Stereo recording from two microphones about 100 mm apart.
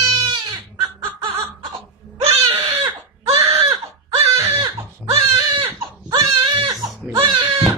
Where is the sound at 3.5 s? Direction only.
75° right (ahead or behind).